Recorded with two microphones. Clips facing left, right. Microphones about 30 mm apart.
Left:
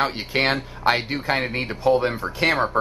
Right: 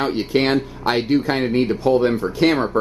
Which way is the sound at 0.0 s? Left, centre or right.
Centre.